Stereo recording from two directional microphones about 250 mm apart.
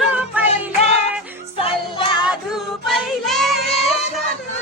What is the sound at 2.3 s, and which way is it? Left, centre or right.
Child singing, centre.